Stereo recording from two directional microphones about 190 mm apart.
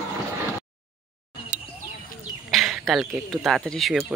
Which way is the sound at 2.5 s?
Centre (ahead or behind).